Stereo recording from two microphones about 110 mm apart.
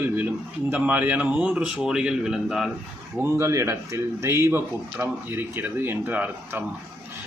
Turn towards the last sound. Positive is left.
turn(degrees=-20)  # may be behind; listen again after turning